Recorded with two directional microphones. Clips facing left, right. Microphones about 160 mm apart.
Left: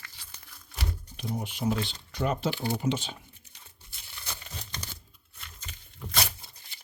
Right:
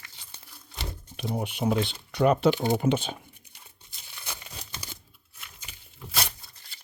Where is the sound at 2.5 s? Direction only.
20° right (ahead or behind).